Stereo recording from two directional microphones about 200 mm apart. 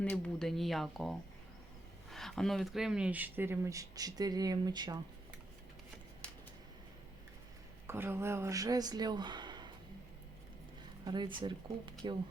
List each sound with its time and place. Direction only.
0.0 s speech: 5° left (ahead or behind); by 4.9 s 20° right (ahead or behind)
6.2 s a sound: 5° left (ahead or behind)
7.9 s speech: 10° right (ahead or behind)
11.0 s speech: 20° right (ahead or behind)